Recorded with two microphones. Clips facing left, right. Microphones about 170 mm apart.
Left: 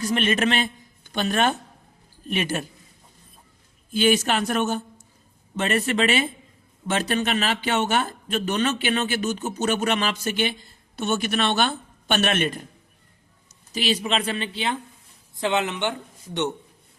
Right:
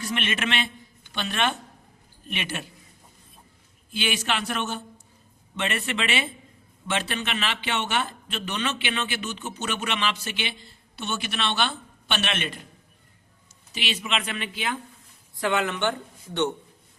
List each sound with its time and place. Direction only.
0.0 s a man's voice: 40° left (ahead or behind)
3.9 s a man's voice: 45° left (ahead or behind)
13.7 s speech: 40° left (ahead or behind); by 16.5 s 15° left (ahead or behind)